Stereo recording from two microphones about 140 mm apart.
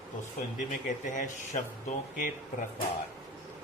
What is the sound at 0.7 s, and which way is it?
Speech, 65° left (ahead or behind).